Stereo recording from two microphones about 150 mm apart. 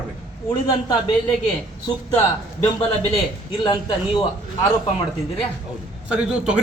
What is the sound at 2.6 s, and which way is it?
A man's voice, 40° left (ahead or behind).